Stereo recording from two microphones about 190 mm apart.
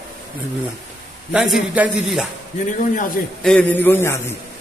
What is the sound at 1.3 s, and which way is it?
Speech, 5° right (ahead or behind).